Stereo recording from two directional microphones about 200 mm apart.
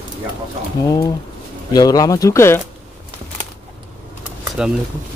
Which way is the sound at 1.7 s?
20° left (ahead or behind).